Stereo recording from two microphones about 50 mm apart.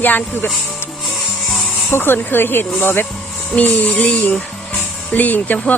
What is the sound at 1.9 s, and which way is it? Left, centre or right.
Speech, left.